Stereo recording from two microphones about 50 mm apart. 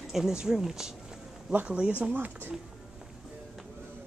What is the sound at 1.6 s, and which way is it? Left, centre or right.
Speech, right.